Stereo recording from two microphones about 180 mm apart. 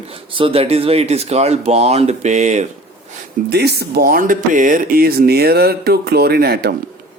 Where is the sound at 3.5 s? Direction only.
65° right (ahead or behind).